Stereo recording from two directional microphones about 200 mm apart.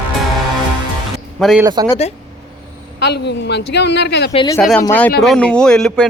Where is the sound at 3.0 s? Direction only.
55° left (ahead or behind).